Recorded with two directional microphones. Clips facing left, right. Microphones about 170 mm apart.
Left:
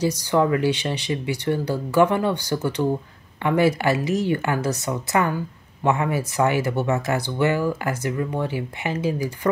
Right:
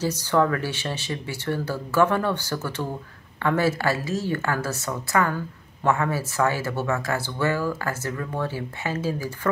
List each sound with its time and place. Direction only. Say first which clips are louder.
0.0 s speech: left 2 dB; 15° left (ahead or behind)